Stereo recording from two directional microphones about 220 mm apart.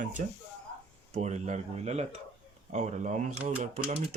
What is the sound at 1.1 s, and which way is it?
Speech, 30° right (ahead or behind).